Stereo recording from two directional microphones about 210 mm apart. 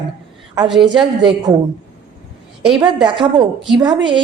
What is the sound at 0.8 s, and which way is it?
Speech, 25° right (ahead or behind).